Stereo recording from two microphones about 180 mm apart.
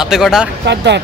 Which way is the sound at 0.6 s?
70° right (ahead or behind).